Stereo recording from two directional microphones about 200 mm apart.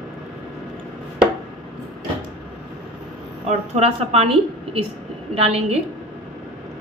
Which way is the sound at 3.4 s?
30° right (ahead or behind).